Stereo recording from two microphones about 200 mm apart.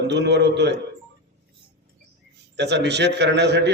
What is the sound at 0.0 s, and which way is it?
Speech, 60° right (ahead or behind).